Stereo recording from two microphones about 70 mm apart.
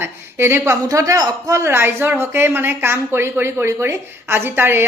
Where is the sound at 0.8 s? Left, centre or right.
Right.